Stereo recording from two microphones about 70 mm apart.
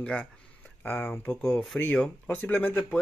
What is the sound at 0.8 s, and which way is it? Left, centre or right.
Speech, left.